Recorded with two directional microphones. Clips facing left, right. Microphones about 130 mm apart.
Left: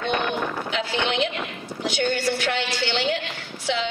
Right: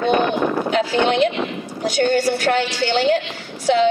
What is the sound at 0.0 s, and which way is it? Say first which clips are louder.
A woman's voice: right 7 dB; 40° right (ahead or behind).